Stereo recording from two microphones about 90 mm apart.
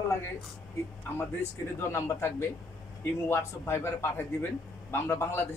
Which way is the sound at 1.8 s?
30° left (ahead or behind).